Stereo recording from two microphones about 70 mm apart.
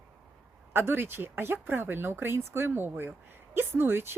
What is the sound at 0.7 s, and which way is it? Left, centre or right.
Speech, right.